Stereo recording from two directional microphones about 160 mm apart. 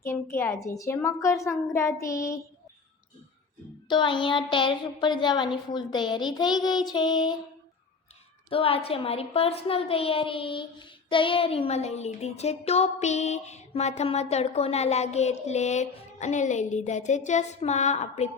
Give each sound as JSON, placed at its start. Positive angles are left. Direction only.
{"t": 0.0, "sound": "a woman's voice", "side_deg": 15}
{"t": 3.8, "sound": "a woman's voice", "side_deg": 30}
{"t": 8.4, "sound": "a woman's voice", "side_deg": 35}